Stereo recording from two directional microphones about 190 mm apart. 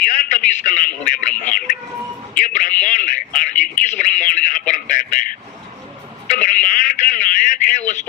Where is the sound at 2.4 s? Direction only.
45° left (ahead or behind).